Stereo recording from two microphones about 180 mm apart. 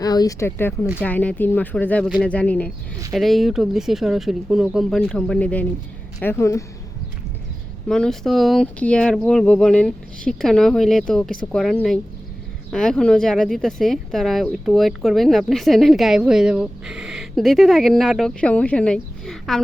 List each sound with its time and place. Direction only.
0.0 s speech: 20° left (ahead or behind)
7.9 s speech: 5° left (ahead or behind)